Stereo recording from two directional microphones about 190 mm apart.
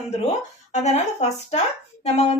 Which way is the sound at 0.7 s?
35° left (ahead or behind).